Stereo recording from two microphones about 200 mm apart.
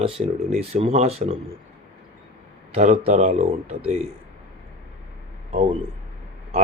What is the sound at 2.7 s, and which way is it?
Speech, 35° right (ahead or behind).